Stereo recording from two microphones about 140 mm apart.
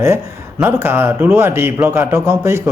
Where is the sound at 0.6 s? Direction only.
15° right (ahead or behind).